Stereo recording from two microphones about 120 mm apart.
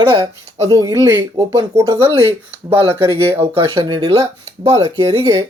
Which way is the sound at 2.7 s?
15° right (ahead or behind).